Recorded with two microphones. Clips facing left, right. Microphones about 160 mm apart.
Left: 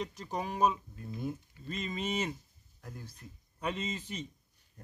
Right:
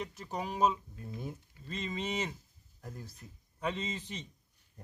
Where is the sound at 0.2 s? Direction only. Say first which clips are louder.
Right 1 dB; 10° right (ahead or behind).